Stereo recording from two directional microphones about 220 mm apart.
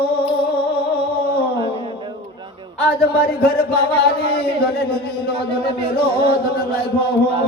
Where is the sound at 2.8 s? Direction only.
45° left (ahead or behind).